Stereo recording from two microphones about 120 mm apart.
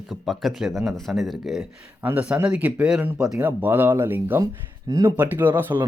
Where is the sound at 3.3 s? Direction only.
15° right (ahead or behind).